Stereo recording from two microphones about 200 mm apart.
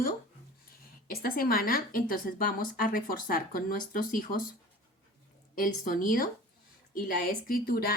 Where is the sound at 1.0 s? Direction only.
50° left (ahead or behind).